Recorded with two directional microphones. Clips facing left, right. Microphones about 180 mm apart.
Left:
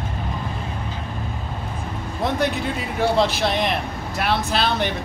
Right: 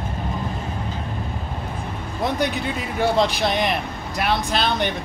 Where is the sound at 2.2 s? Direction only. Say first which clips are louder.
Left 1 dB; centre (ahead or behind).